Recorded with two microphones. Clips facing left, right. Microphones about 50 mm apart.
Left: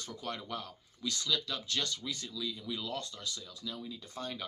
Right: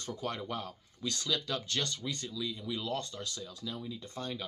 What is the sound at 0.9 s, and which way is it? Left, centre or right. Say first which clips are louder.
Speech: even; centre.